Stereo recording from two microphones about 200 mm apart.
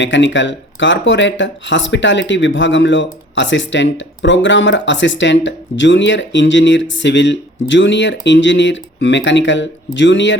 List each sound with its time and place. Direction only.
0.0 s speech: 65° left (ahead or behind)